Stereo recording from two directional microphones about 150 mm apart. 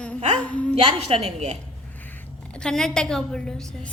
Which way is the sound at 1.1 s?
45° right (ahead or behind).